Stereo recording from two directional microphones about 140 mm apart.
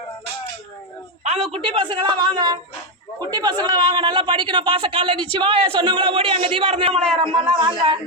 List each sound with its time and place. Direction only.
1.2 s a man's voice: 55° right (ahead or behind); by 7.9 s 35° right (ahead or behind)